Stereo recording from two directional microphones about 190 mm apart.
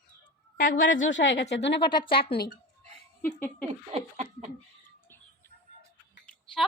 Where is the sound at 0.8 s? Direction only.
85° left; by 1.6 s 65° left (ahead or behind).